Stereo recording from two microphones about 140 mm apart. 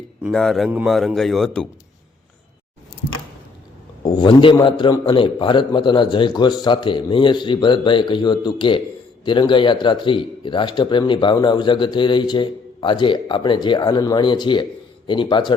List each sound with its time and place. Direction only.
0.2 s speech: centre (ahead or behind)
4.0 s a man's voice: 35° left (ahead or behind)